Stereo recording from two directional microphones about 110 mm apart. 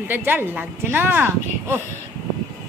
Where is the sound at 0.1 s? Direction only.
20° right (ahead or behind).